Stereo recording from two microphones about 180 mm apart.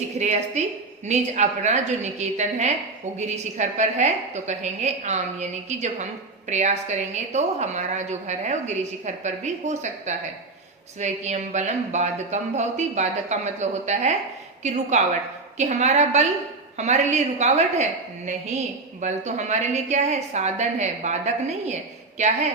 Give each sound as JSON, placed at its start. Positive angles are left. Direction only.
{"t": 0.2, "sound": "a woman's voice", "side_deg": -40}